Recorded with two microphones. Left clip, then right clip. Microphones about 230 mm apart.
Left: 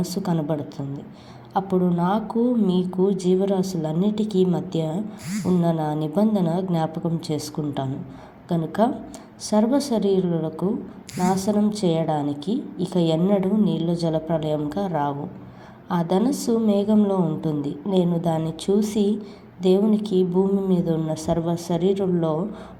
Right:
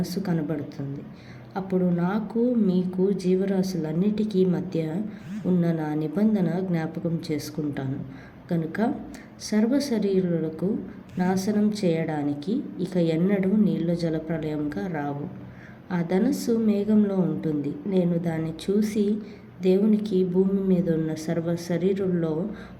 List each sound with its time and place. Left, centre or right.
0.1 s a woman's voice: centre
1.5 s a woman's voice: centre